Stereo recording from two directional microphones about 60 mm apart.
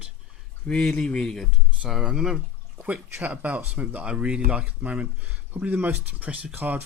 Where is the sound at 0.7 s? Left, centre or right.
Centre.